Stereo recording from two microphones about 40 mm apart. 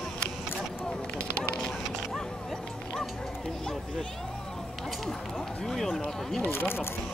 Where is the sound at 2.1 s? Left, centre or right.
Centre.